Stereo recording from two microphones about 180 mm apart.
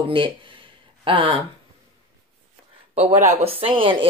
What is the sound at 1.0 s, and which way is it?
Speech, 30° right (ahead or behind).